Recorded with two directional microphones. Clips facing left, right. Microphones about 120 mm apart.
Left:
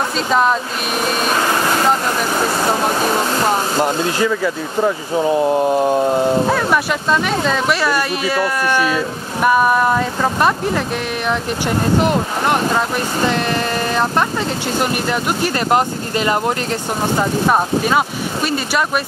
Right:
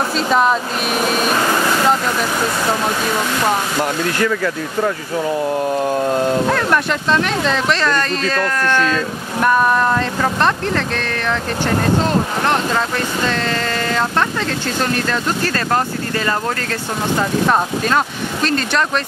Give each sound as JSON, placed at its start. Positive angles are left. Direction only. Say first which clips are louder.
{"t": 0.3, "sound": "speech", "louder": "even", "side_deg": 0}
{"t": 3.1, "sound": "speech", "louder": "left 1 dB", "side_deg": 35}
{"t": 4.2, "sound": "speech", "louder": "left 1 dB", "side_deg": 10}
{"t": 14.8, "sound": "speech", "louder": "left 1 dB", "side_deg": 15}